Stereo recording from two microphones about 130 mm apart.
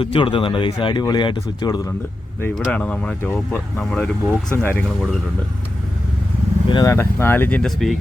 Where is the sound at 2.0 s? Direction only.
15° left (ahead or behind).